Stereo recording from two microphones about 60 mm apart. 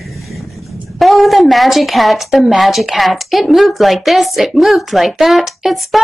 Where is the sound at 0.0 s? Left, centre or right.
Centre.